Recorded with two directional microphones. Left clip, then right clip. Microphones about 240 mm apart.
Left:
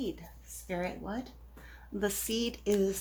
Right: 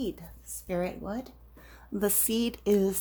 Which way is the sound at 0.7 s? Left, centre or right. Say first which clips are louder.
Right 4 dB; right.